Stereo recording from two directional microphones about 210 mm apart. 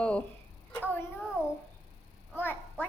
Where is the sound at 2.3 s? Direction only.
10° left (ahead or behind).